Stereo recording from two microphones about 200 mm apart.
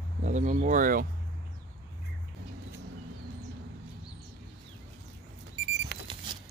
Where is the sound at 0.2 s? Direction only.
35° right (ahead or behind).